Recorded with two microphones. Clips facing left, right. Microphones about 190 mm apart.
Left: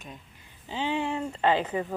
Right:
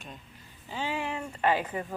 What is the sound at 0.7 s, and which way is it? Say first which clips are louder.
Speech: left 4 dB; 20° left (ahead or behind).